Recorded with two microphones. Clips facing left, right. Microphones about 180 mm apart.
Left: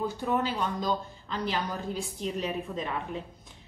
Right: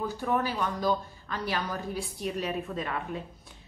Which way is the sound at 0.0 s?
20° left (ahead or behind).